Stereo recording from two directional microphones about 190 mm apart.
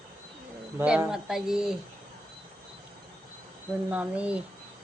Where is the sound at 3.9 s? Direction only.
5° right (ahead or behind).